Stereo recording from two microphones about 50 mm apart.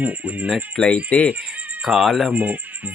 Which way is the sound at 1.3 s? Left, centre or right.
Right.